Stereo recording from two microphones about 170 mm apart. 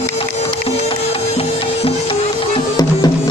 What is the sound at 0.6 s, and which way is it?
Music, 35° left (ahead or behind).